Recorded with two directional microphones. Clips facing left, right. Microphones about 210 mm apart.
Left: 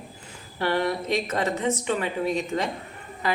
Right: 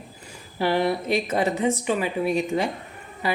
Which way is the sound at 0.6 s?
15° right (ahead or behind).